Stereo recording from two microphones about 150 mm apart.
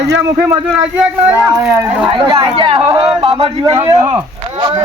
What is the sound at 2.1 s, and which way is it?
A man's voice, 30° right (ahead or behind).